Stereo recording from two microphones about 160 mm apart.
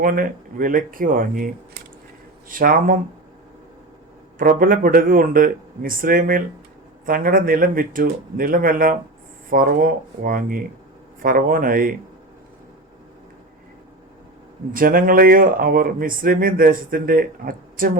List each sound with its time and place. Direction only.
0.0 s speech: 60° right (ahead or behind)
4.4 s speech: 60° right (ahead or behind)
14.7 s speech: 60° right (ahead or behind)